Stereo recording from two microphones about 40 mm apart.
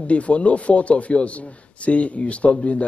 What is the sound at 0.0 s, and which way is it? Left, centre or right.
Speech, left.